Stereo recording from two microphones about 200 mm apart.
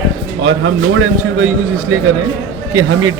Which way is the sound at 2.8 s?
90° right.